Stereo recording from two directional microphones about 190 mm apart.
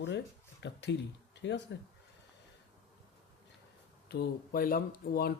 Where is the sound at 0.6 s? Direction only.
65° left (ahead or behind).